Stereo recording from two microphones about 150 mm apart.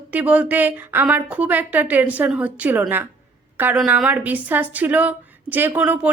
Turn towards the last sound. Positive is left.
turn(degrees=-10)  # may be behind; listen again after turning